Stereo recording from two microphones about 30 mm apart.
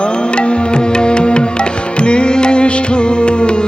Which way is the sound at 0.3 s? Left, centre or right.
Left.